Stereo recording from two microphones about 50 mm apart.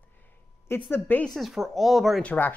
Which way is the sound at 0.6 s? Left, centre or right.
Left.